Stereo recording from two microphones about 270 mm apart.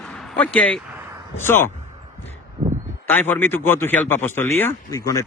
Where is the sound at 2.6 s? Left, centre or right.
Centre.